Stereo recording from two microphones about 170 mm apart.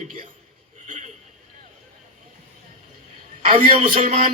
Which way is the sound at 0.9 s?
45° right (ahead or behind).